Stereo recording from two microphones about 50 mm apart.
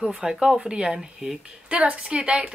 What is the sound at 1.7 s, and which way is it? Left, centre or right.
Speech, right.